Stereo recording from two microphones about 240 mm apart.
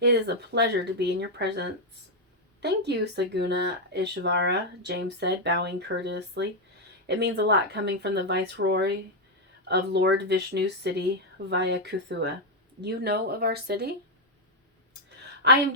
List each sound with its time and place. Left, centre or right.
0.0 s speech: right
15.4 s speech: right